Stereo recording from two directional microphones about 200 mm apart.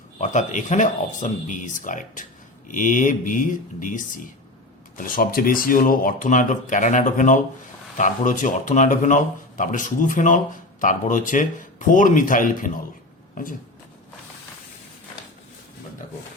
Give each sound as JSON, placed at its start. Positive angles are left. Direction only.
{"t": 0.2, "sound": "speech", "side_deg": 40}